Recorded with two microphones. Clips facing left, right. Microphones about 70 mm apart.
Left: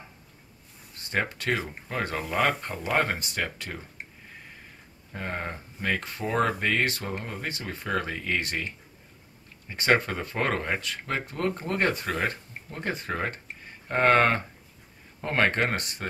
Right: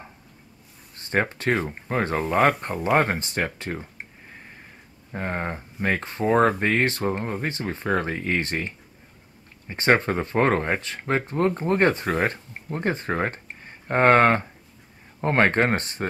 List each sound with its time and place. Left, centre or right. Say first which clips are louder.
1.1 s speech: right 5 dB; right
5.1 s speech: right 5 dB; right